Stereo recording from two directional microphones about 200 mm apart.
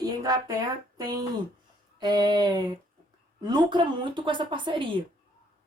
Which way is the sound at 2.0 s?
20° right (ahead or behind).